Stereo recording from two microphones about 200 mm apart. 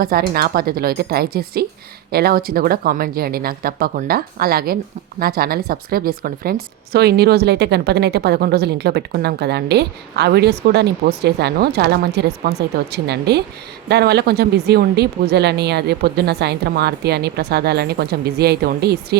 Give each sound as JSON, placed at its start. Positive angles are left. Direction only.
{"t": 0.0, "sound": "a woman's voice", "side_deg": -50}